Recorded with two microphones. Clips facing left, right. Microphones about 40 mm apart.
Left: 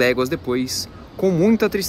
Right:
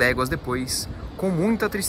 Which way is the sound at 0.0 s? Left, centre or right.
Left.